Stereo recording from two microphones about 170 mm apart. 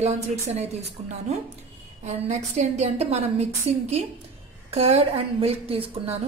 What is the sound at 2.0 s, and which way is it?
A woman's voice, 45° right (ahead or behind).